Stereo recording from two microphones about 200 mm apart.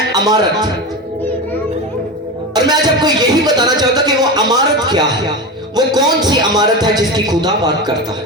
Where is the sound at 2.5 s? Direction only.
20° right (ahead or behind).